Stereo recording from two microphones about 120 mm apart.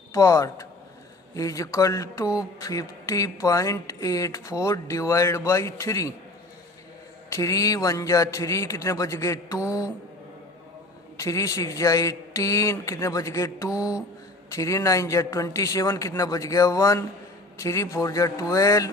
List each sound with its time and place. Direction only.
0.1 s speech: 25° left (ahead or behind)
7.3 s speech: 25° left (ahead or behind)
11.2 s speech: 25° left (ahead or behind)